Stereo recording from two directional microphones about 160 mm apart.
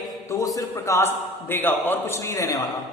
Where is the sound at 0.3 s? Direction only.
20° left (ahead or behind).